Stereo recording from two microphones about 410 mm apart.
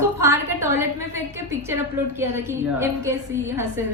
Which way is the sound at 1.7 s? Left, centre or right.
Centre.